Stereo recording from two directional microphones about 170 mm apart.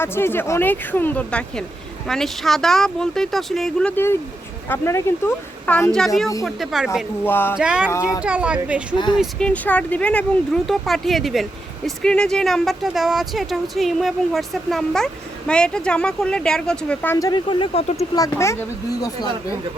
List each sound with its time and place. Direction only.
0.0 s speech: 15° left (ahead or behind); by 7.0 s centre (ahead or behind)
7.3 s speech: 10° left (ahead or behind)
7.5 s speech: 5° right (ahead or behind)
17.2 s speech: 25° left (ahead or behind)
17.9 s speech: 20° left (ahead or behind)